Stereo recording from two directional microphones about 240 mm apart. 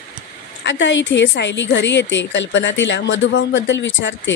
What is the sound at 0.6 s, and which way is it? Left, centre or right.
Speech, left.